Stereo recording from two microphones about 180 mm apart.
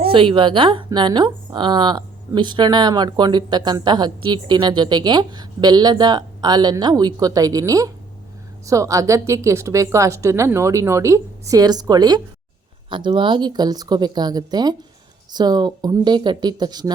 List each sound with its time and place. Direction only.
0.1 s a woman's voice: 30° right (ahead or behind)